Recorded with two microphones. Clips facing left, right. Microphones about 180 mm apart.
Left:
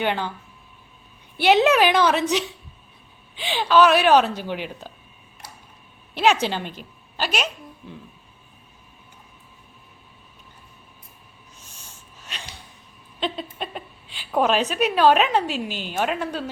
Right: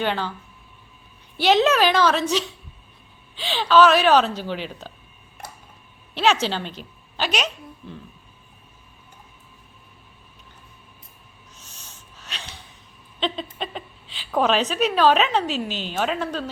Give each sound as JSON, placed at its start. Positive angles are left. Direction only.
{"t": 0.0, "sound": "a woman's voice", "side_deg": 15}
{"t": 1.4, "sound": "a woman's voice", "side_deg": 15}
{"t": 6.1, "sound": "a woman's voice", "side_deg": 10}
{"t": 11.6, "sound": "snort", "side_deg": 10}
{"t": 13.1, "sound": "a woman's voice", "side_deg": 5}